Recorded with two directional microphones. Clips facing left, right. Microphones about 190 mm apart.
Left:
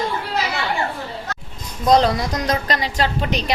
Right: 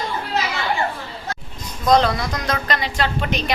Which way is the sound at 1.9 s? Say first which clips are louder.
Left 1 dB; 35° left (ahead or behind).